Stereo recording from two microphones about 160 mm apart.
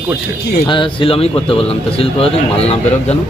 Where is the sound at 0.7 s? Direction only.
35° left (ahead or behind).